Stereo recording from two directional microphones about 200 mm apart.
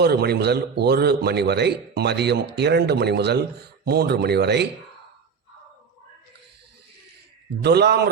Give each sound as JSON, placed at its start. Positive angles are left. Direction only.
{"t": 0.0, "sound": "a man's voice", "side_deg": -55}
{"t": 7.6, "sound": "a man's voice", "side_deg": -55}